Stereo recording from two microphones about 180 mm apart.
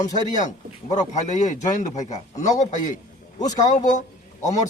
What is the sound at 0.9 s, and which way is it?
Speech, 40° left (ahead or behind).